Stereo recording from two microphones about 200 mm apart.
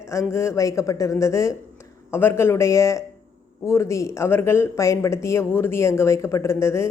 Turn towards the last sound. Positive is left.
turn(degrees=15)  # may be behind; listen again after turning